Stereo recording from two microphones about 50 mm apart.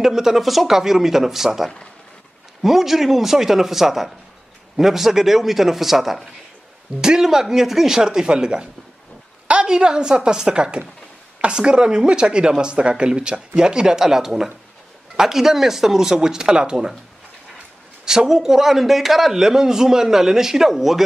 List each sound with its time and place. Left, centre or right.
0.0 s a man's voice: centre
18.0 s a man's voice: centre